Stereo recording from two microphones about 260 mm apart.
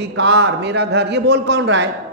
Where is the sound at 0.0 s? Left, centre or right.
Right.